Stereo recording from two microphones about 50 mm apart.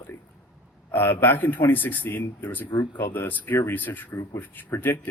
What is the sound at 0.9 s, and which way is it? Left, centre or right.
A man's voice, left.